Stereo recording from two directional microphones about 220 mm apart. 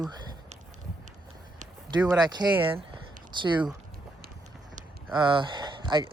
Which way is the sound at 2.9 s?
20° right (ahead or behind).